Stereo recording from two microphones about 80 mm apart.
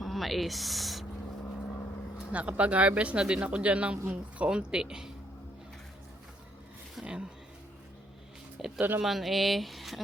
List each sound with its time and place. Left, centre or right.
0.0 s speech: centre
2.3 s speech: centre
7.0 s speech: centre
8.5 s a sound: centre
9.0 s speech: centre